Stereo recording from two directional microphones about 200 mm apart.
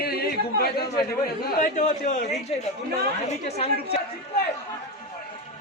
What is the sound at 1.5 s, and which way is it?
A woman's voice, 35° left (ahead or behind).